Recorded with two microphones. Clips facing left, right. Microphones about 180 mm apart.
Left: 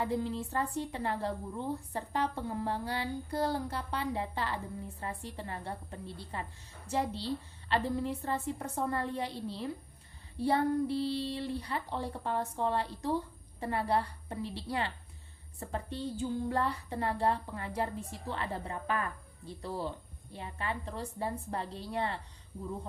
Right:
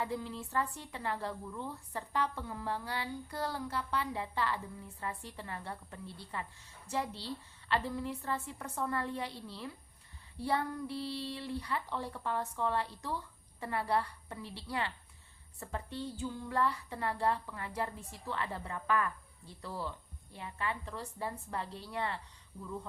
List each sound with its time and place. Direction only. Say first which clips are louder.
0.0 s speech: left 5 dB; 30° left (ahead or behind)